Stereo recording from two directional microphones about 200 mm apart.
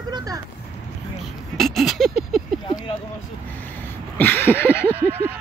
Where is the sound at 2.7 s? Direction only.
20° left (ahead or behind).